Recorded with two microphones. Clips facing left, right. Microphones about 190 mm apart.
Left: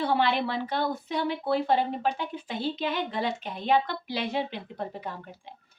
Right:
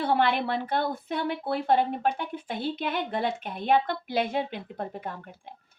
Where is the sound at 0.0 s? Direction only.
55° right (ahead or behind).